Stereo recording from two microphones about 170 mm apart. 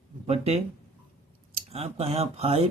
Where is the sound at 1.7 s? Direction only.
35° right (ahead or behind).